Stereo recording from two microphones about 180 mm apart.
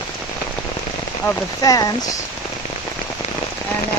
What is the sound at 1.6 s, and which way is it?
Speech, 20° left (ahead or behind).